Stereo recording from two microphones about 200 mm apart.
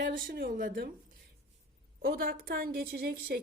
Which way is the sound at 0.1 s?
45° right (ahead or behind).